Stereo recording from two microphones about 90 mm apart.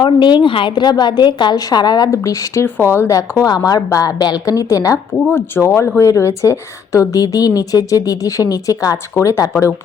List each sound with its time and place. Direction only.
0.0 s a woman's voice: 55° left (ahead or behind)
2.0 s a woman's voice: 35° left (ahead or behind)
2.6 s a woman's voice: 25° left (ahead or behind); by 5.2 s 40° left (ahead or behind)
5.3 s a woman's voice: 25° left (ahead or behind)